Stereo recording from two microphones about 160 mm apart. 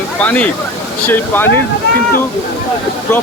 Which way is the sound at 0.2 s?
10° left (ahead or behind).